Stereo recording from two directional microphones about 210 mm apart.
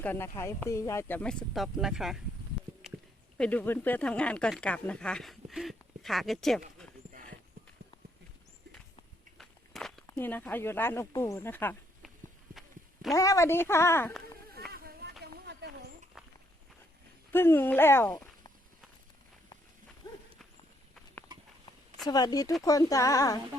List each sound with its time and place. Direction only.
0.0 s speech: 10° left (ahead or behind)
3.3 s speech: 5° left (ahead or behind)
9.4 s walk: centre (ahead or behind)
10.1 s speech: 10° left (ahead or behind)
12.5 s a sound: centre (ahead or behind)
13.1 s speech: 15° left (ahead or behind)
14.7 s a sound: 45° right (ahead or behind)
17.3 s speech: 10° left (ahead or behind)
20.0 s horse: 20° left (ahead or behind)
22.0 s speech: 20° left (ahead or behind)